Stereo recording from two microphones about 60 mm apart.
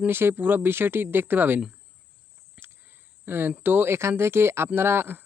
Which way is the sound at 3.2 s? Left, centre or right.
Right.